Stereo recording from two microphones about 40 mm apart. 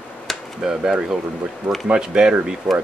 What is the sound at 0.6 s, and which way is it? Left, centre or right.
Speech, centre.